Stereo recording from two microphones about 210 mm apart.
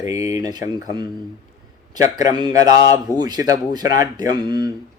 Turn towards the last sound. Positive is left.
turn(degrees=-20)  # may be behind; listen again after turning